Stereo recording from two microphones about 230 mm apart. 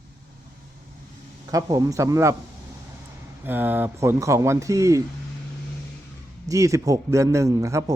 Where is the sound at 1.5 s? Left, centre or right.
Centre.